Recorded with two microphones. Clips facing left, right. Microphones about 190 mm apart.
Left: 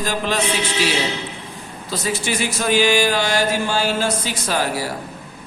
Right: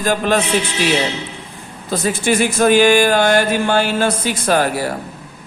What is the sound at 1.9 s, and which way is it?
Mantra, 55° right (ahead or behind).